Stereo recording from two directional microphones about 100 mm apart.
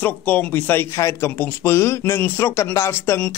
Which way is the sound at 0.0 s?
15° left (ahead or behind).